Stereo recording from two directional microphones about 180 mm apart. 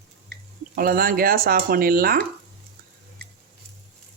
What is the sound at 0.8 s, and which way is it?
Speech, 55° right (ahead or behind).